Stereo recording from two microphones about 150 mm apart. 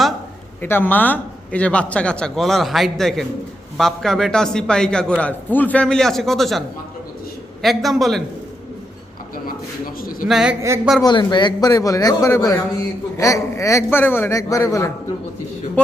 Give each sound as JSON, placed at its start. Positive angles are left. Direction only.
{"t": 0.6, "sound": "a man's voice", "side_deg": 15}
{"t": 9.8, "sound": "a sound", "side_deg": 75}
{"t": 10.2, "sound": "a man's voice", "side_deg": -5}
{"t": 11.0, "sound": "a man's voice", "side_deg": 30}